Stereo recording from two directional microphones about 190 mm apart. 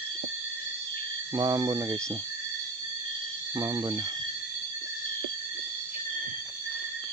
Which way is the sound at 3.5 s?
20° right (ahead or behind).